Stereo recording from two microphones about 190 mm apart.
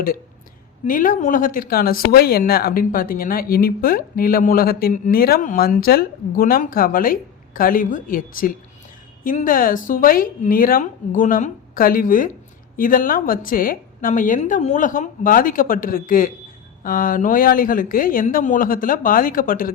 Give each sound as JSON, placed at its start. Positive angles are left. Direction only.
{"t": 0.9, "sound": "speech", "side_deg": 45}